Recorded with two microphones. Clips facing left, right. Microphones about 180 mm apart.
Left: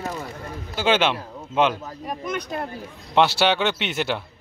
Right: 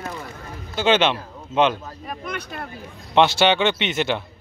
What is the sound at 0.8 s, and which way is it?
Speech, 10° left (ahead or behind).